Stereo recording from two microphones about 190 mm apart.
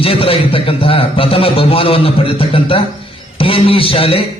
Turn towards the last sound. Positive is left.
turn(degrees=30)  # may be behind; listen again after turning